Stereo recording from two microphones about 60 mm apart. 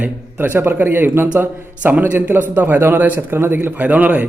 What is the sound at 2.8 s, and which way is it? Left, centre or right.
Speech, right.